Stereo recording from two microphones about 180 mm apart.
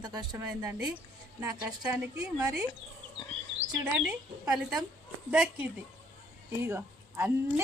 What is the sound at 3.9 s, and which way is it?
A woman's voice, 5° right (ahead or behind).